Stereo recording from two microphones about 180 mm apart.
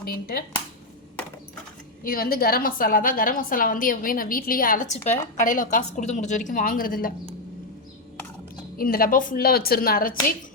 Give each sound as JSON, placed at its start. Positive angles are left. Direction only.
{"t": 0.0, "sound": "speech", "side_deg": 55}
{"t": 2.0, "sound": "a woman's voice", "side_deg": 55}
{"t": 8.8, "sound": "a woman's voice", "side_deg": 55}